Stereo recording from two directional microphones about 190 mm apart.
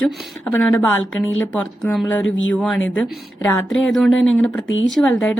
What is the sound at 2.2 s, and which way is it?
Speech, 90° left.